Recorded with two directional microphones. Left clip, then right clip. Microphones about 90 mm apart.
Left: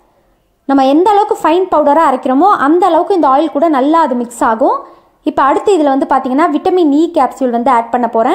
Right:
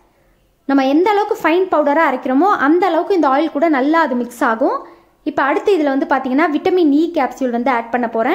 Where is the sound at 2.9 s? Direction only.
20° left (ahead or behind).